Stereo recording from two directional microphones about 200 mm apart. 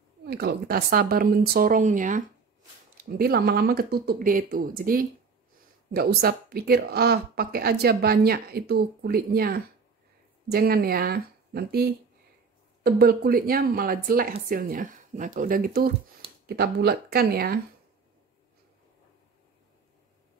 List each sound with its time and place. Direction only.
0.3 s speech: 50° right (ahead or behind)